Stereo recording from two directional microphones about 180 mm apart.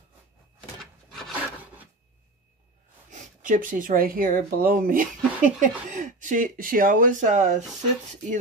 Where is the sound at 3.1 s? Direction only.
45° right (ahead or behind).